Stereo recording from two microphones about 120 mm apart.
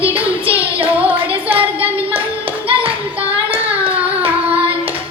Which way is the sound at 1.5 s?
15° right (ahead or behind).